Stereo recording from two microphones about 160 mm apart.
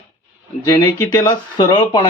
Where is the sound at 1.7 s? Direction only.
30° left (ahead or behind).